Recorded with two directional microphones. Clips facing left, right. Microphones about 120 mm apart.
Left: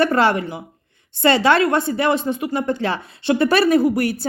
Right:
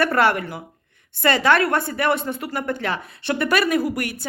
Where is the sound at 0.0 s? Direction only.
25° left (ahead or behind).